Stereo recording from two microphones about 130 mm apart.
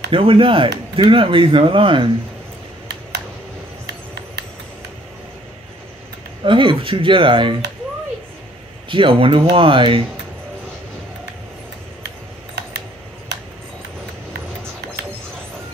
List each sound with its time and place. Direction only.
0.1 s speech: 45° right (ahead or behind)
6.4 s speech: 40° right (ahead or behind)
8.8 s speech: 40° right (ahead or behind)